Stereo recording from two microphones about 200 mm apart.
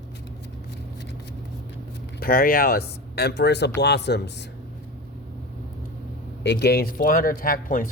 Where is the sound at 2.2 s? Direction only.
45° left (ahead or behind).